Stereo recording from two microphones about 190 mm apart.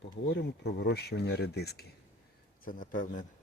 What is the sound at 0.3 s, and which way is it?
Speech, 60° left (ahead or behind).